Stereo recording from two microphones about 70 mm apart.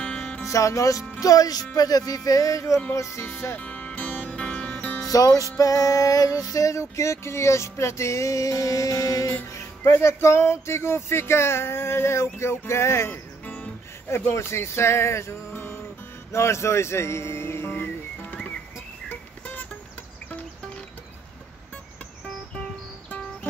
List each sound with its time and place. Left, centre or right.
0.0 s music: centre
0.5 s music: left
2.9 s speech: left
3.6 s music: centre
5.0 s music: left
9.5 s speech: left
15.5 s music: left
16.3 s speech: left